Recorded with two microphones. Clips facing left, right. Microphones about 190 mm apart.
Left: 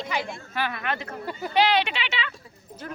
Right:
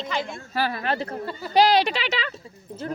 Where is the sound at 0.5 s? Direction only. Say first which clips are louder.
Right 4 dB; 35° right (ahead or behind).